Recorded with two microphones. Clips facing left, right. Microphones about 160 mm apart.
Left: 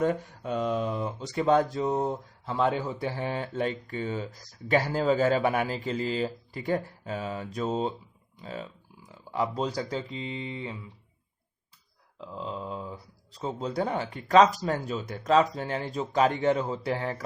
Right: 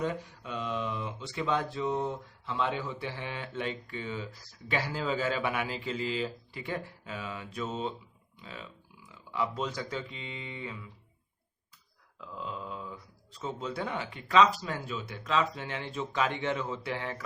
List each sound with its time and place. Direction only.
0.0 s speech: 45° left (ahead or behind); by 10.8 s 30° left (ahead or behind)
12.2 s speech: 30° left (ahead or behind)